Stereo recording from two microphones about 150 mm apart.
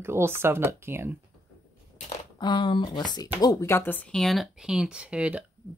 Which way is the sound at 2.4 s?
30° left (ahead or behind).